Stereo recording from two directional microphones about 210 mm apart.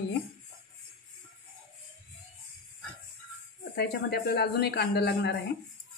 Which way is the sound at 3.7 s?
50° left (ahead or behind).